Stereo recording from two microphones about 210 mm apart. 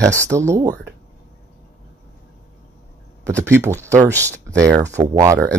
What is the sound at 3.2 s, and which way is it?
Speech, 15° right (ahead or behind).